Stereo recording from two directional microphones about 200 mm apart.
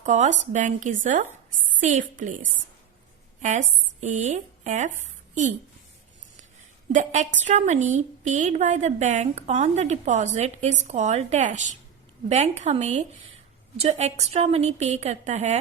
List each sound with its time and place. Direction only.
0.0 s a woman's voice: 35° right (ahead or behind)
4.0 s speech: 35° right (ahead or behind)
6.9 s a woman's voice: 35° right (ahead or behind)